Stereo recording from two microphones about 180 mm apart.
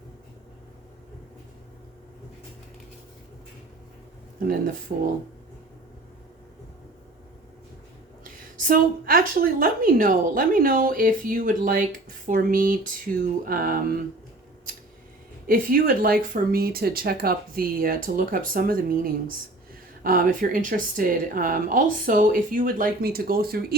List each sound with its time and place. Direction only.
4.4 s a woman's voice: 50° right (ahead or behind)
8.2 s a woman's voice: 50° right (ahead or behind)
15.4 s a woman's voice: 50° right (ahead or behind)